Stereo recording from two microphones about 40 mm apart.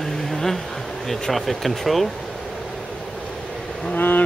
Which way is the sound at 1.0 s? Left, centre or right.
Centre.